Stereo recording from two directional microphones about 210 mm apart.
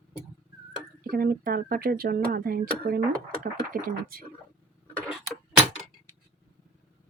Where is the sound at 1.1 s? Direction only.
45° right (ahead or behind).